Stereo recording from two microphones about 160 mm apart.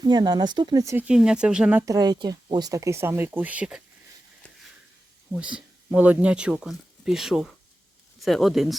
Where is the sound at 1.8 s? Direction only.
20° right (ahead or behind); by 3.8 s 5° right (ahead or behind).